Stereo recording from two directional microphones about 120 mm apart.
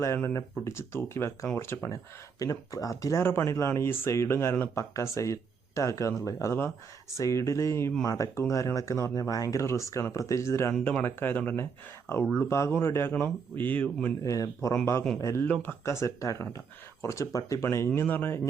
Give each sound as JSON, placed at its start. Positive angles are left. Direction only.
{"t": 0.0, "sound": "speech", "side_deg": 25}
{"t": 14.3, "sound": "speech", "side_deg": 25}
{"t": 15.4, "sound": "speech", "side_deg": 15}